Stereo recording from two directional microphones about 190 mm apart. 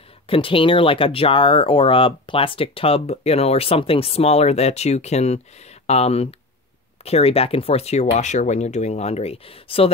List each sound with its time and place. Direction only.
0.3 s speech: 30° left (ahead or behind)